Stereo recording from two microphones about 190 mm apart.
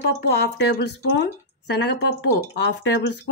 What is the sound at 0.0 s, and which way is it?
Speech, 60° left (ahead or behind).